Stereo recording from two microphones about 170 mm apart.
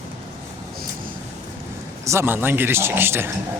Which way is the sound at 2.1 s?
15° right (ahead or behind).